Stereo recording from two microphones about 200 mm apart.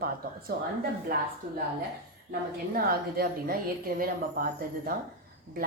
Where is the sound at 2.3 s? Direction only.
50° right (ahead or behind).